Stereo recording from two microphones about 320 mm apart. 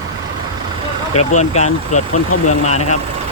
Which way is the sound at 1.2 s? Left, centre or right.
Left.